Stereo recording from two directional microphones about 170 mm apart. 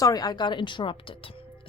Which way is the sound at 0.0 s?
20° left (ahead or behind).